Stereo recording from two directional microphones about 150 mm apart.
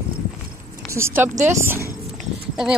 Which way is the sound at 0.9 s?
15° right (ahead or behind).